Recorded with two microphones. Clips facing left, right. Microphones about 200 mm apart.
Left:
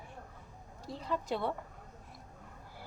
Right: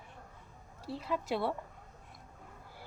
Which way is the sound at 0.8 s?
5° right (ahead or behind).